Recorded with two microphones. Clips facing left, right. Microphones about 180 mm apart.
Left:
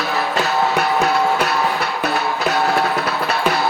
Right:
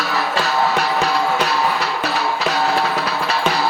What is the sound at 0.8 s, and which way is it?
Music, 55° left (ahead or behind).